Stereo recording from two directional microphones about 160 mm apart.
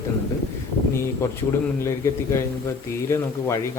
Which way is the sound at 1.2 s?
15° left (ahead or behind).